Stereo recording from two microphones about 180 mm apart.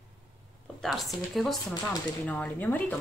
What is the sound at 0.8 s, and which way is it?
A woman's voice, centre (ahead or behind).